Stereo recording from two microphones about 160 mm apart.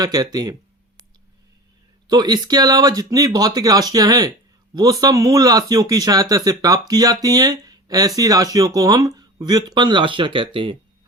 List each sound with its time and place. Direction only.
0.0 s speech: 25° right (ahead or behind)
2.0 s speech: 25° right (ahead or behind)